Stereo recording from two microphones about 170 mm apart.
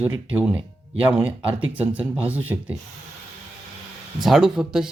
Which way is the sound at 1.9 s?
10° right (ahead or behind).